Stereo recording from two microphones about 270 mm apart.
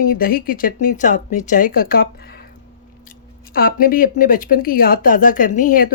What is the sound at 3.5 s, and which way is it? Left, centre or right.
Speech, left.